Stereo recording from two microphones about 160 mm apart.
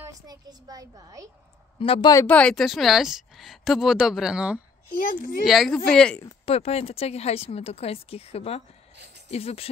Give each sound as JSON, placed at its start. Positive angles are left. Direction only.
{"t": 0.3, "sound": "a child's voice", "side_deg": -25}
{"t": 1.8, "sound": "speech", "side_deg": 30}
{"t": 2.1, "sound": "a woman's voice", "side_deg": 10}
{"t": 4.9, "sound": "speech", "side_deg": 60}
{"t": 5.5, "sound": "a woman's voice", "side_deg": 0}
{"t": 6.4, "sound": "speech", "side_deg": 40}